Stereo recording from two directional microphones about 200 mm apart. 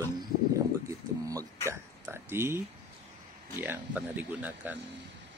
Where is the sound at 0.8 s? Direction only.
15° right (ahead or behind).